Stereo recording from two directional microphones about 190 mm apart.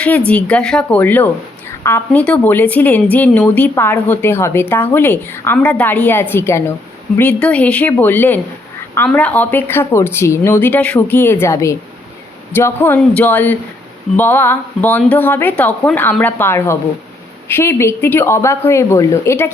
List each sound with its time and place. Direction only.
0.3 s a woman's voice: 5° left (ahead or behind)